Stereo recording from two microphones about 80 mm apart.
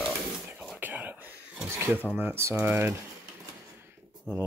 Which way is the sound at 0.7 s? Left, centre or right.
Right.